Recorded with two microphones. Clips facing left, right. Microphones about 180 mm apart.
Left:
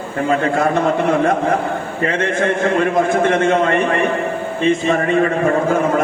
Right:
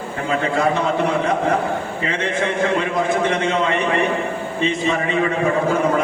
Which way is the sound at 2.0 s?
50° left (ahead or behind).